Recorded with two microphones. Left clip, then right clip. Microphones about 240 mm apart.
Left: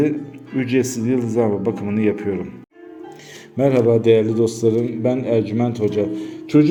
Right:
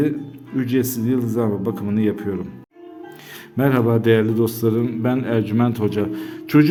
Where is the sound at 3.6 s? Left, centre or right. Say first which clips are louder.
Left 3 dB; right.